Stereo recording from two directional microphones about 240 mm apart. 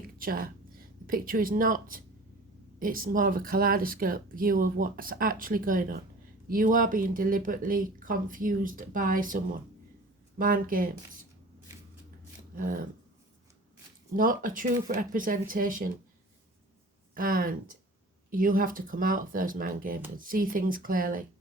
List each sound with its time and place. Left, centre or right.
0.2 s speech: right
14.2 s speech: right
17.2 s speech: right